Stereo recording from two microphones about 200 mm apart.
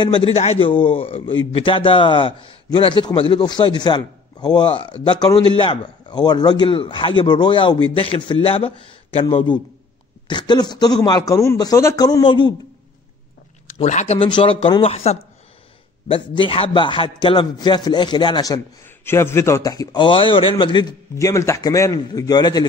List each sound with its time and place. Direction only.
0.0 s a man's voice: 25° left (ahead or behind)
13.7 s a man's voice: 35° left (ahead or behind); by 22.7 s 20° left (ahead or behind)